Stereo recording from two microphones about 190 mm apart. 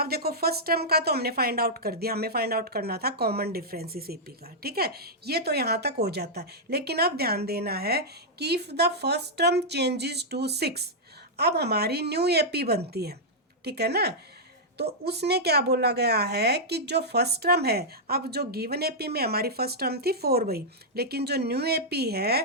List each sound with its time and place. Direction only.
0.0 s speech: 55° right (ahead or behind)